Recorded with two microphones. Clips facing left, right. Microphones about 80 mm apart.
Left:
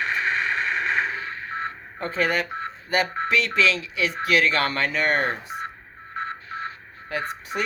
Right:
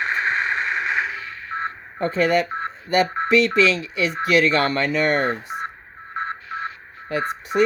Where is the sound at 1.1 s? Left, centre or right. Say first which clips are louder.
Left 1 dB; left.